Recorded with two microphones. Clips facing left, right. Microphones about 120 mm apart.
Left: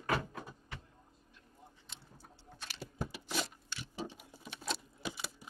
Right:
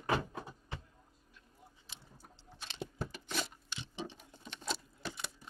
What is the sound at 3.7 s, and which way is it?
Clock, 25° right (ahead or behind).